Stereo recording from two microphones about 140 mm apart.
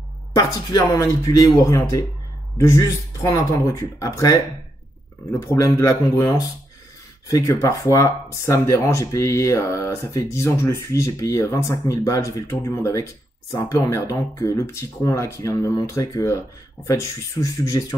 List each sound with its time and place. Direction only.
0.4 s speech: 25° left (ahead or behind)
5.5 s speech: 25° left (ahead or behind)